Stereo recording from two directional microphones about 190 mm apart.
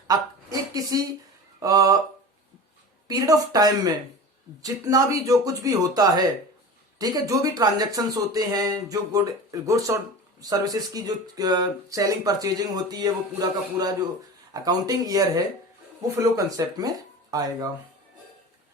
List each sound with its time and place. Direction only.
0.7 s speech: 20° right (ahead or behind)
1.5 s a sound: 20° right (ahead or behind)
3.1 s speech: 20° right (ahead or behind)